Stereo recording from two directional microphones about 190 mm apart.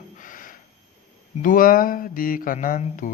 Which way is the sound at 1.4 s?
45° left (ahead or behind).